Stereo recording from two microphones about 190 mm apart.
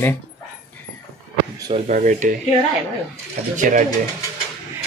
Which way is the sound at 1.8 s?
40° right (ahead or behind).